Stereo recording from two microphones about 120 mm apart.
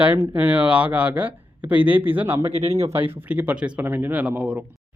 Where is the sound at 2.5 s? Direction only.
60° right (ahead or behind).